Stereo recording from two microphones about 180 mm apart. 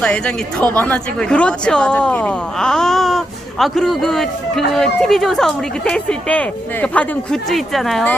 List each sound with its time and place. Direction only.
0.0 s speech: 5° left (ahead or behind)